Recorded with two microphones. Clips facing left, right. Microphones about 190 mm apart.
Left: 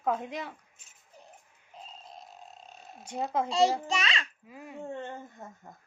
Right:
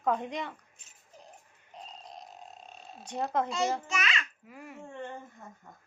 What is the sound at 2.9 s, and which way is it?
Speech, 10° left (ahead or behind).